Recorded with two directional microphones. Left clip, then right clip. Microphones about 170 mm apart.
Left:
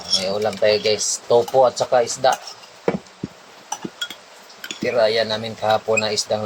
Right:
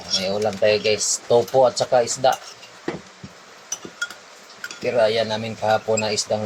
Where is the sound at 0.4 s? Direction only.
10° right (ahead or behind).